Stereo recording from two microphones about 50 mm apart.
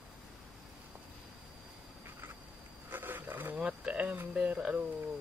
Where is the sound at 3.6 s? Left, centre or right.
Right.